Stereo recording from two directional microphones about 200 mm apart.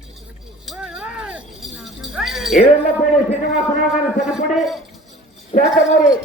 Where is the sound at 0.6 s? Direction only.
5° right (ahead or behind).